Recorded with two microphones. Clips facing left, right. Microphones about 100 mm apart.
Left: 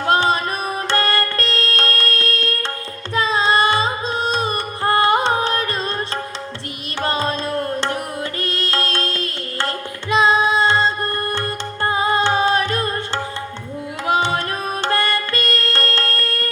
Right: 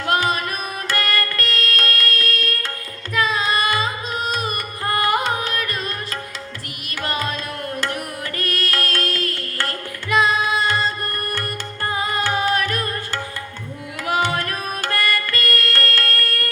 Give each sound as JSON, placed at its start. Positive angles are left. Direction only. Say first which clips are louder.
{"t": 0.0, "sound": "music", "louder": "left 3 dB", "side_deg": 30}
{"t": 3.2, "sound": "carnatic music", "louder": "left 4 dB", "side_deg": 30}
{"t": 7.0, "sound": "music", "louder": "left 4 dB", "side_deg": 30}
{"t": 14.1, "sound": "music", "louder": "left 2 dB", "side_deg": 25}